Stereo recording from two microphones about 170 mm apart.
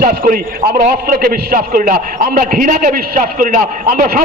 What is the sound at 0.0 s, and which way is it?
A man's voice, 60° right (ahead or behind).